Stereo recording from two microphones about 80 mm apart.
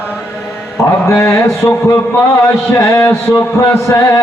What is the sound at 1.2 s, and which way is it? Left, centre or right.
A man's voice, left.